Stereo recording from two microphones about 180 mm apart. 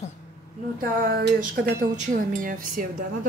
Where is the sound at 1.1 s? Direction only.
65° right (ahead or behind).